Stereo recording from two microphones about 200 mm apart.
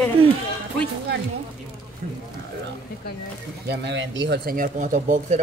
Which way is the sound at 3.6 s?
55° right (ahead or behind).